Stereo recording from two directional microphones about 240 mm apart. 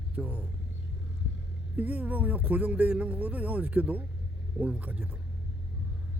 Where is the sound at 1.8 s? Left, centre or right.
Centre.